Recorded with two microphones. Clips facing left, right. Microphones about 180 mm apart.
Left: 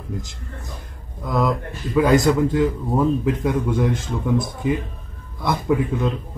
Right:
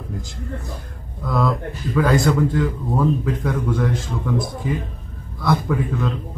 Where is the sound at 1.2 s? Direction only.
20° left (ahead or behind).